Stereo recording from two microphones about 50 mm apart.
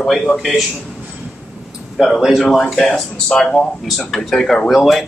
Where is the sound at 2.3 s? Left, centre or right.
Centre.